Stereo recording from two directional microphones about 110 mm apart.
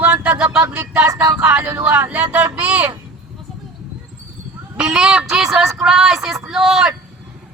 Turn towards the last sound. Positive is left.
turn(degrees=-5)  # may be behind; listen again after turning